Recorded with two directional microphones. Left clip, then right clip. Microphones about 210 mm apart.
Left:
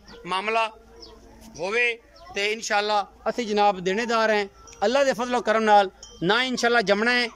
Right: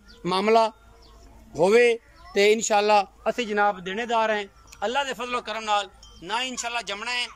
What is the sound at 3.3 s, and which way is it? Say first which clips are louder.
Speech: left 3 dB; 20° left (ahead or behind).